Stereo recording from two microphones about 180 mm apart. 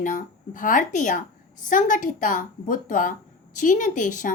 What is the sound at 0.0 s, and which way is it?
Speech, 50° left (ahead or behind).